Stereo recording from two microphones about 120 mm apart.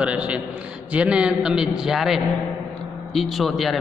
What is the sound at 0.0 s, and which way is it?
A man's voice, 10° right (ahead or behind).